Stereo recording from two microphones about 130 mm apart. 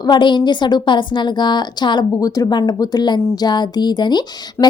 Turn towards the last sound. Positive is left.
turn(degrees=35)  # may be behind; listen again after turning